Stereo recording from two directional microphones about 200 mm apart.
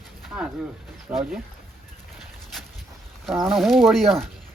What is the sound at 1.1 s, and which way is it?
Speech, 5° right (ahead or behind).